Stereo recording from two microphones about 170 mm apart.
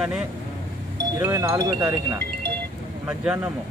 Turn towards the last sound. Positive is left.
turn(degrees=-10)  # may be behind; listen again after turning